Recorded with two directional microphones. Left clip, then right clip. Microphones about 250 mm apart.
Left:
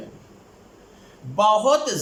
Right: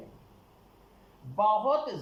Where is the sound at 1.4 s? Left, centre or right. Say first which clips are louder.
Left 8 dB; left.